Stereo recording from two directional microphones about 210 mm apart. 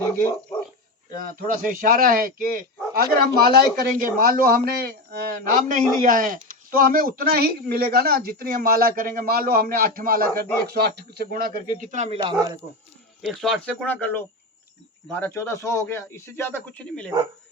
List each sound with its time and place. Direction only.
1.1 s speech: 40° right (ahead or behind); by 12.5 s 20° right (ahead or behind)
13.2 s a man's voice: centre (ahead or behind)